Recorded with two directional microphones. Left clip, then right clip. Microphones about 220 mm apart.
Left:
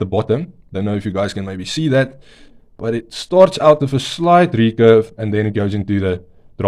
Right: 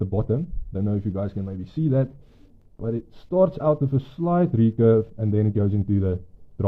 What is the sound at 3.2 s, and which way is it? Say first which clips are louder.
Speech: left 10 dB; 30° left (ahead or behind).